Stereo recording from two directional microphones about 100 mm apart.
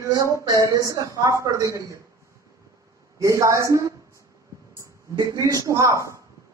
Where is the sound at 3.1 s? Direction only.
30° right (ahead or behind).